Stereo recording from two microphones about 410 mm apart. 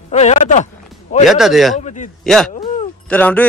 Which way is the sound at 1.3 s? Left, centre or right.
Centre.